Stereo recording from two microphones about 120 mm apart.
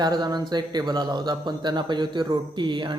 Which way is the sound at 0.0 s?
35° right (ahead or behind).